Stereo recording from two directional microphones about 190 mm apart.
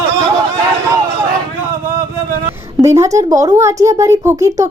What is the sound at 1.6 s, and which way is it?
Speech, 15° right (ahead or behind).